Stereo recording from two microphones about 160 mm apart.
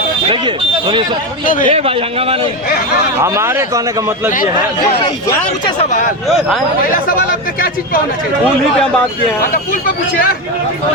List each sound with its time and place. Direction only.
0.3 s a sound: 30° right (ahead or behind)
1.5 s a man's voice: 60° left (ahead or behind)
1.7 s a man's voice: 35° right (ahead or behind)
3.2 s speech: 15° right (ahead or behind)
5.9 s a man's voice: 55° left (ahead or behind)
6.2 s speech: centre (ahead or behind)